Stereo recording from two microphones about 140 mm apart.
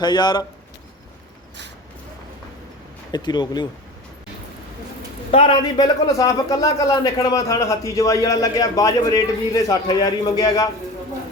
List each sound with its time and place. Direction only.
0.0 s speech: 30° left (ahead or behind)
3.1 s speech: 30° left (ahead or behind)
5.3 s speech: 35° left (ahead or behind)